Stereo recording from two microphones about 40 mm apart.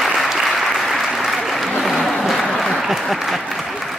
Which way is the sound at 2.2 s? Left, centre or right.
Centre.